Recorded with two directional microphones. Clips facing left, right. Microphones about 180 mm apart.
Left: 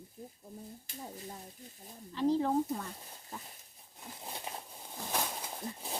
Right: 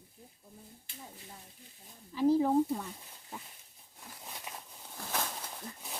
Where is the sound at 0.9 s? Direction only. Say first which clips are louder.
Left 5 dB; 40° left (ahead or behind).